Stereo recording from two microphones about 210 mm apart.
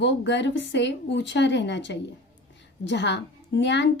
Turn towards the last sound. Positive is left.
turn(degrees=55)  # may be behind; listen again after turning